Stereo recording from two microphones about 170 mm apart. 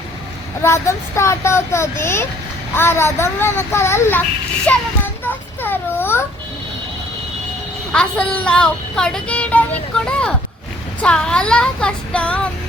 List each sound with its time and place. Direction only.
0.6 s speech: 15° left (ahead or behind)
7.9 s speech: 5° left (ahead or behind)
11.0 s child singing: 5° left (ahead or behind)